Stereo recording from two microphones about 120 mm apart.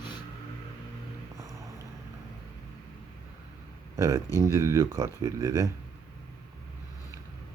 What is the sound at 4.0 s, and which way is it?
Speech, 25° right (ahead or behind).